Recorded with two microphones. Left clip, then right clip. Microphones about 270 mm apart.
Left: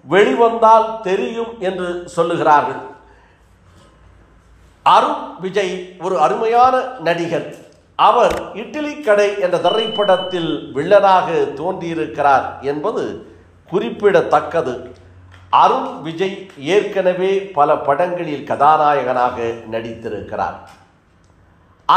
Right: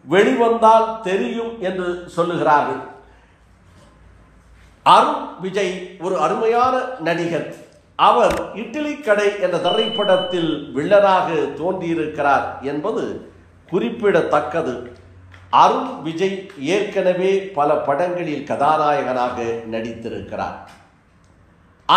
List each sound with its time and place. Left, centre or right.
0.1 s speech: centre
4.8 s a man's voice: centre
21.9 s speech: centre